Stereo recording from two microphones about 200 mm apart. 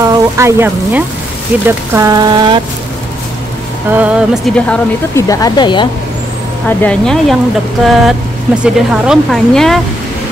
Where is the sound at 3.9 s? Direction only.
5° right (ahead or behind).